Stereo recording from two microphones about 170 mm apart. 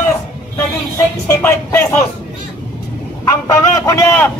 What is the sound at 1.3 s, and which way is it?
Speech, 15° left (ahead or behind).